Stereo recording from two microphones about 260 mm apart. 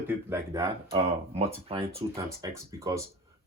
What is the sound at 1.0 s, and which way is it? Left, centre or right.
Speech, right.